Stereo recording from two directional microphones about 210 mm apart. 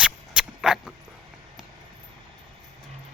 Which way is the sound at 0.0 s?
5° right (ahead or behind).